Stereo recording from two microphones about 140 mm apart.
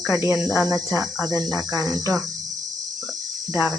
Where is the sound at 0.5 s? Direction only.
25° right (ahead or behind).